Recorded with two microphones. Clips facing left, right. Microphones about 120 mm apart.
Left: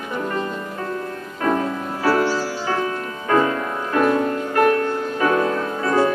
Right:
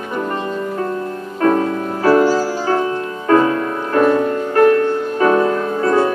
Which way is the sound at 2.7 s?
30° right (ahead or behind).